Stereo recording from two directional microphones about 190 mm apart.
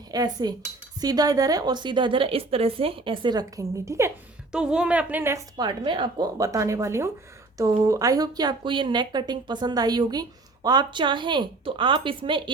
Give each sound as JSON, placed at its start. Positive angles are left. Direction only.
{"t": 0.1, "sound": "speech", "side_deg": -20}
{"t": 4.5, "sound": "a woman's voice", "side_deg": -5}